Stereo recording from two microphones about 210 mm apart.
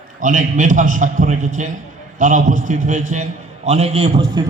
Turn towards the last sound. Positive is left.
turn(degrees=-25)  # may be behind; listen again after turning